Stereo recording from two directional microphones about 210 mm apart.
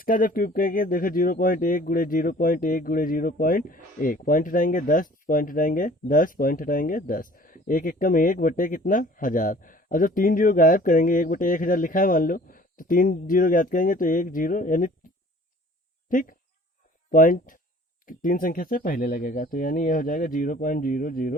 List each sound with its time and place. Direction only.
0.0 s speech: 40° left (ahead or behind)
16.0 s speech: 40° left (ahead or behind)